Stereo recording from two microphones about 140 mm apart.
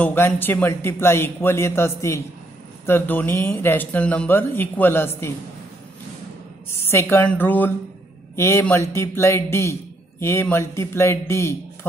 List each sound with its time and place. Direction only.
0.0 s speech: 15° left (ahead or behind)
6.8 s speech: 15° left (ahead or behind)